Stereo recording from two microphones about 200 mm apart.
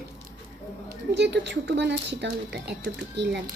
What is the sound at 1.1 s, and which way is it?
A woman's voice, 60° right (ahead or behind).